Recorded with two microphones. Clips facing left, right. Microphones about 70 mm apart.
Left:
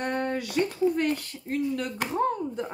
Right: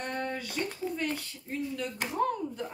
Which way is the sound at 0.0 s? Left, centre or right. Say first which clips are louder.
Left 6 dB; left.